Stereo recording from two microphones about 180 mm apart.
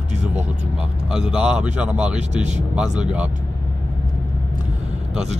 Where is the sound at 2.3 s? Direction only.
40° right (ahead or behind).